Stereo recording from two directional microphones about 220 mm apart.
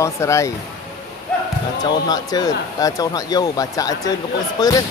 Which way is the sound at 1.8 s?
20° left (ahead or behind).